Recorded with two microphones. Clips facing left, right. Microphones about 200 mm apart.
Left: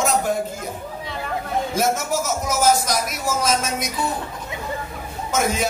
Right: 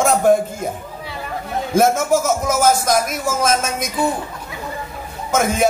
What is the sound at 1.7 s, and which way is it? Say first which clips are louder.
A man's voice: right 9 dB; 50° right (ahead or behind).